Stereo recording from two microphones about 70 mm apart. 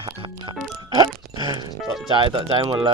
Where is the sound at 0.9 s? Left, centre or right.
Right.